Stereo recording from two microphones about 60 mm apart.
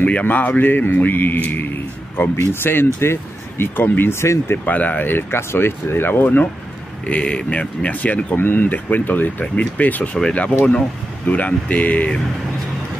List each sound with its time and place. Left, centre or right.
0.0 s speech: left
4.6 s speech: left
7.1 s speech: centre